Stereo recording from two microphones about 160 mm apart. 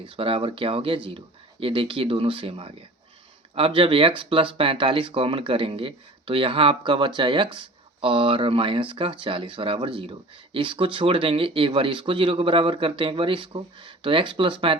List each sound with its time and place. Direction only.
0.0 s speech: 35° right (ahead or behind)